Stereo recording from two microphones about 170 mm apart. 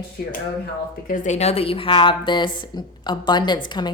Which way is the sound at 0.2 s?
60° left (ahead or behind).